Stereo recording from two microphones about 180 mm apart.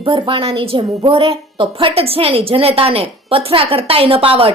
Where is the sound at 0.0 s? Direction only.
30° right (ahead or behind).